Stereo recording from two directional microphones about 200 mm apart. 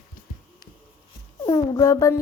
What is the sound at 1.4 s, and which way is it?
Speech, 20° left (ahead or behind).